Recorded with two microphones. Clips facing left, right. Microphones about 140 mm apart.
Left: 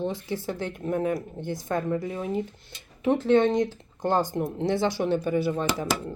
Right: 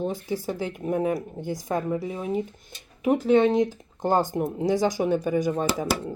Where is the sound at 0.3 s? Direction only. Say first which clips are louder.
Right 2 dB; 10° right (ahead or behind).